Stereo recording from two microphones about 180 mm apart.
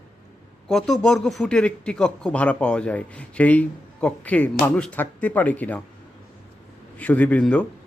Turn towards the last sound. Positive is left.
turn(degrees=5)  # may be behind; listen again after turning